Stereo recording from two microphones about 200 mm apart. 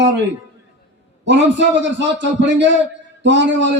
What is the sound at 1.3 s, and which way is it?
A man's voice, 65° right (ahead or behind).